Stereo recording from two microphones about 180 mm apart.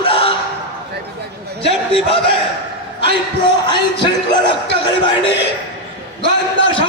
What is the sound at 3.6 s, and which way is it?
Music, 25° left (ahead or behind).